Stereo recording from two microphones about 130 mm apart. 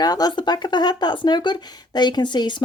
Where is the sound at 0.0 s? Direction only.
30° left (ahead or behind).